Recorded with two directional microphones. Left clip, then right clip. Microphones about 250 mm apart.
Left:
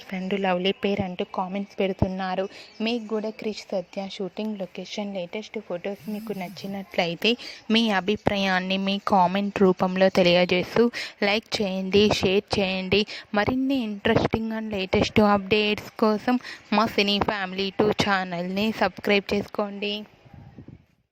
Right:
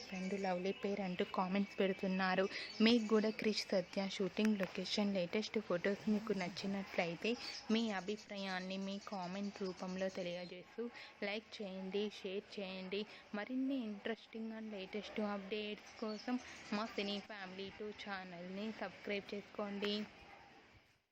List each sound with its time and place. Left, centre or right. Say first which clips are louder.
0.1 s a woman's voice: left 16 dB; left; by 6.7 s centre
6.7 s a woman's voice: left 15 dB; left